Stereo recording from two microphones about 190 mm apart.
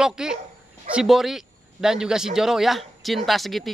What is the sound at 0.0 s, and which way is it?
Speech, 5° right (ahead or behind).